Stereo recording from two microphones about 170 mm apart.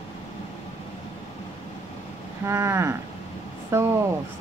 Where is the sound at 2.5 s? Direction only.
15° right (ahead or behind).